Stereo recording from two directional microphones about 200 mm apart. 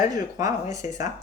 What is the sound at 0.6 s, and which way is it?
Speech, 35° left (ahead or behind).